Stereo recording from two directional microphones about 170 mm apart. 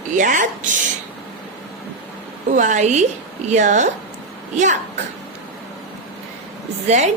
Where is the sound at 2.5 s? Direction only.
45° right (ahead or behind).